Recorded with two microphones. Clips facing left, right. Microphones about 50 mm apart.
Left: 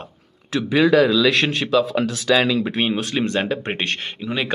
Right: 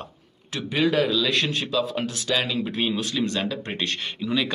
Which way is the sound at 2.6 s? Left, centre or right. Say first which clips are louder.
Left 4 dB; left.